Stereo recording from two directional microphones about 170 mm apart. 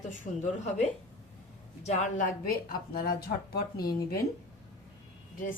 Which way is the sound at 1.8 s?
45° left (ahead or behind).